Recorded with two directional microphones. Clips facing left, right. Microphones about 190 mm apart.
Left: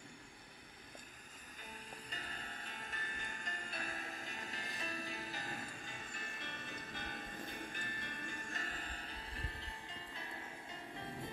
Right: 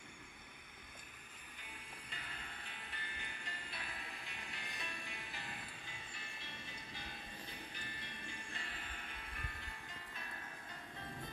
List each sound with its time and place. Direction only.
1.6 s music: 40° left (ahead or behind); by 10.3 s 25° left (ahead or behind)